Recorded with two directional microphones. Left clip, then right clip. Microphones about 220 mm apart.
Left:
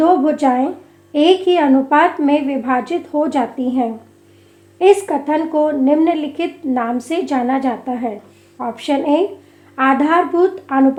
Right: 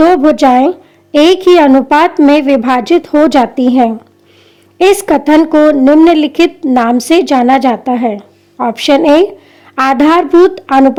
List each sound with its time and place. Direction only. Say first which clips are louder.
0.0 s a woman's voice: right 7 dB; 45° right (ahead or behind)